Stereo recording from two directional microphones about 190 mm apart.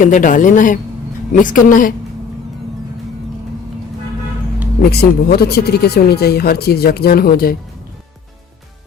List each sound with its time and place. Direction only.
0.0 s speech: 45° left (ahead or behind)
4.8 s speech: 55° left (ahead or behind)